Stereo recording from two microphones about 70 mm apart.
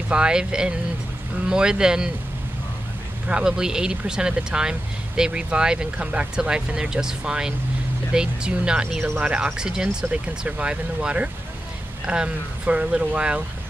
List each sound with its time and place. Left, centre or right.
0.1 s speech: centre
3.3 s speech: centre